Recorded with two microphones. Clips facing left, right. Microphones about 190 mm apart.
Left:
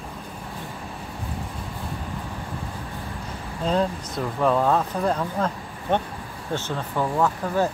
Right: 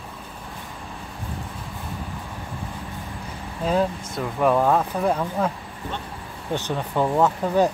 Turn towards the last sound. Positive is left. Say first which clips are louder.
# right 3 dB
turn(degrees=-20)  # may be behind; listen again after turning